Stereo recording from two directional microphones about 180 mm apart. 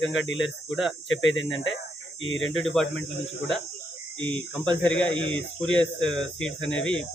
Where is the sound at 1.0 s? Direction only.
90° left.